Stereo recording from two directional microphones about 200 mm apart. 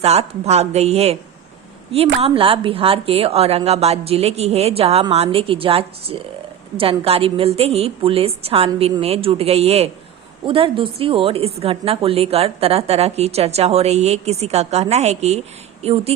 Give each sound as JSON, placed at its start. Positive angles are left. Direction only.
{"t": 0.0, "sound": "a woman's voice", "side_deg": -30}
{"t": 2.2, "sound": "a woman's voice", "side_deg": -25}